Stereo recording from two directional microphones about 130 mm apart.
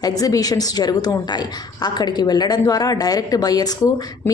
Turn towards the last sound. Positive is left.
turn(degrees=30)  # may be behind; listen again after turning